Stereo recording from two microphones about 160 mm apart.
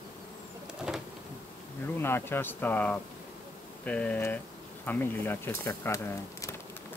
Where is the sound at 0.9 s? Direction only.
5° right (ahead or behind).